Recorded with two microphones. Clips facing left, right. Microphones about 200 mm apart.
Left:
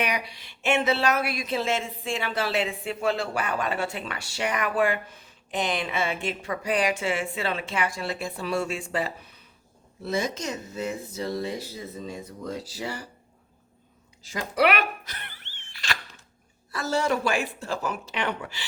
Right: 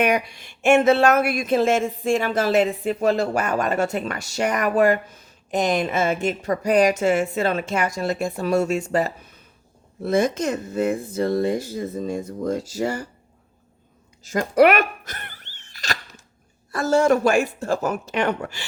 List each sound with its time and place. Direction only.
0.0 s speech: 50° right (ahead or behind)
14.3 s a sound: 45° right (ahead or behind)
16.7 s speech: 50° right (ahead or behind)